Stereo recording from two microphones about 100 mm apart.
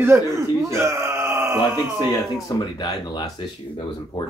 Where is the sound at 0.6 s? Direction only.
25° right (ahead or behind).